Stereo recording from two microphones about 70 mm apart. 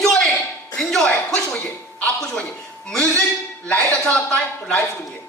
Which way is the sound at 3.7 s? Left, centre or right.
Centre.